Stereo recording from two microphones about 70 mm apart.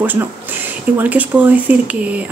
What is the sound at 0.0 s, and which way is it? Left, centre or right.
Speech, right.